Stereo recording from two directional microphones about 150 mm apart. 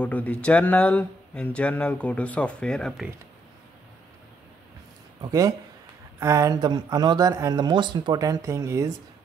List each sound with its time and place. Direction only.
0.0 s speech: 10° left (ahead or behind)
5.2 s speech: 25° right (ahead or behind)